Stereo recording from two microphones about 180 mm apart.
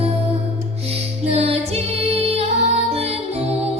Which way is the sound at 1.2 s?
35° right (ahead or behind).